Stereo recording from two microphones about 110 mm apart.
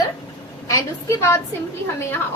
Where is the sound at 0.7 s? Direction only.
25° left (ahead or behind).